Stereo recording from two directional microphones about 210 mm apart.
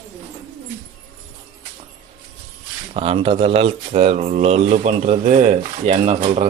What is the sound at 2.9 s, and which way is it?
Speech, 25° right (ahead or behind).